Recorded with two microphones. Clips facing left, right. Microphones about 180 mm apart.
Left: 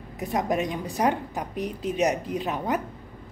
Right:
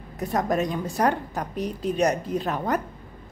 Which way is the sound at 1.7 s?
40° right (ahead or behind).